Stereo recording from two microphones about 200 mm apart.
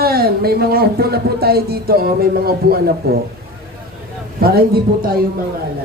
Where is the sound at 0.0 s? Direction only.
50° right (ahead or behind).